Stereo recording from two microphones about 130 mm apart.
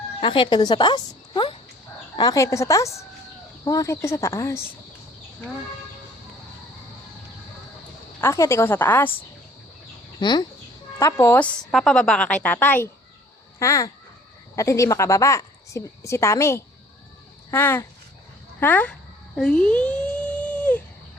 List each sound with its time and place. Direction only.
0.2 s a woman's voice: 40° left (ahead or behind); by 4.6 s 25° left (ahead or behind)
8.2 s a woman's voice: 25° left (ahead or behind)
10.2 s speech: 35° left (ahead or behind)
11.0 s a woman's voice: 20° left (ahead or behind)
11.7 s a woman's voice: centre (ahead or behind)
19.4 s a sound: 5° left (ahead or behind)